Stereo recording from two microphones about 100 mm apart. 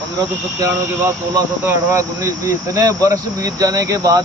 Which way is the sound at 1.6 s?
30° right (ahead or behind).